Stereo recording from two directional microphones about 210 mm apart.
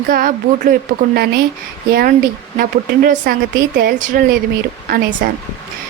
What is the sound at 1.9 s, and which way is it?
Speech, 45° right (ahead or behind).